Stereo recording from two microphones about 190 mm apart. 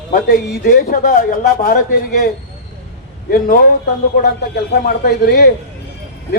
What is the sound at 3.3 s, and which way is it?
Speech, 50° left (ahead or behind).